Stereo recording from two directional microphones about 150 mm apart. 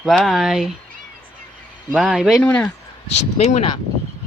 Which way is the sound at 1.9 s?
5° right (ahead or behind).